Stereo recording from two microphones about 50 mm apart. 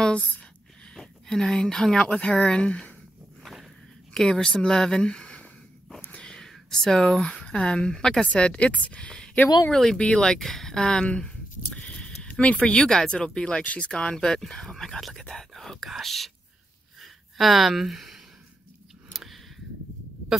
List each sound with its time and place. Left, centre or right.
0.9 s speech: centre
2.0 s speech: left
4.1 s speech: centre
6.1 s whispering: centre
6.7 s speech: centre
9.7 s speech: centre
9.9 s a sound: centre
12.5 s speech: centre
15.0 s speech: centre
17.0 s a sound: centre